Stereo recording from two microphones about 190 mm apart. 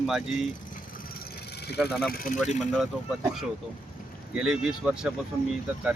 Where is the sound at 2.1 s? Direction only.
45° left (ahead or behind).